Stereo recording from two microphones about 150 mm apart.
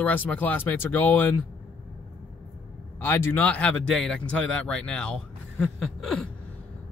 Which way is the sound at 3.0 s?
15° left (ahead or behind).